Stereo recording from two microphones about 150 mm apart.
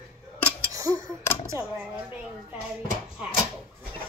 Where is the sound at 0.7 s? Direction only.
20° right (ahead or behind).